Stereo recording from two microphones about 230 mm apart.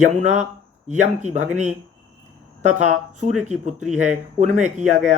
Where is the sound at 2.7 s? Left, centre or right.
Right.